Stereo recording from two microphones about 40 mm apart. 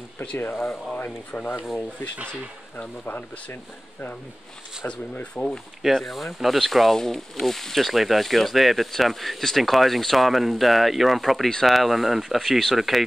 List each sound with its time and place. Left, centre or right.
0.5 s speech: left
0.9 s rub: left
3.1 s rub: left
5.1 s speech: left
5.9 s speech: centre